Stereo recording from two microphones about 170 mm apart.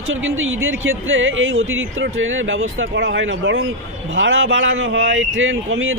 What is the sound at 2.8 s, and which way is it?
Speech, 90° right.